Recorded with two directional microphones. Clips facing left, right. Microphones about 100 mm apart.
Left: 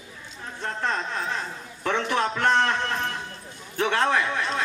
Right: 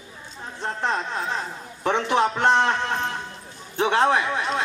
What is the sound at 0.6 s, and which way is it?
A man's voice, 20° right (ahead or behind).